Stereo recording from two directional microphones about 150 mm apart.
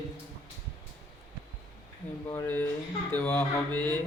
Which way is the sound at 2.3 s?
15° left (ahead or behind).